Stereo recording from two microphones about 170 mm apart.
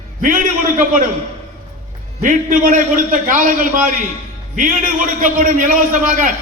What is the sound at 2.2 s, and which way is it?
A man's voice, 50° right (ahead or behind).